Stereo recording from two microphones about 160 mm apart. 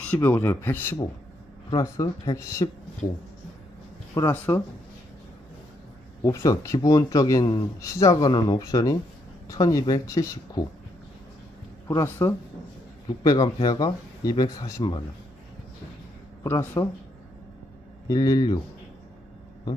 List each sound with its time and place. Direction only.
0.0 s a man's voice: 10° left (ahead or behind)
4.1 s a man's voice: 15° left (ahead or behind)
6.2 s speech: 20° left (ahead or behind)
11.9 s a man's voice: 15° left (ahead or behind)
16.4 s a man's voice: 15° left (ahead or behind)
18.0 s speech: 20° left (ahead or behind)